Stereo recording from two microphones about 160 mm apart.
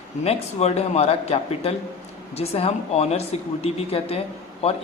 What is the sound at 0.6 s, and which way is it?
Speech, 40° left (ahead or behind).